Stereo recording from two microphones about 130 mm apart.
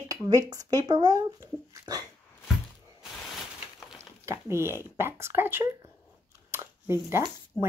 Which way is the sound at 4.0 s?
20° right (ahead or behind).